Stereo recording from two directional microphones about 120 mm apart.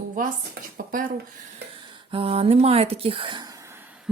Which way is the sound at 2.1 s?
55° right (ahead or behind).